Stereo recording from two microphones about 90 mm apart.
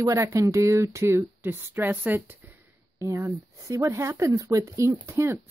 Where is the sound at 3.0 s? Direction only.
35° right (ahead or behind).